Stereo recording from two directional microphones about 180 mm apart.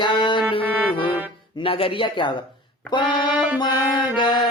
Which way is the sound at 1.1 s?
10° right (ahead or behind).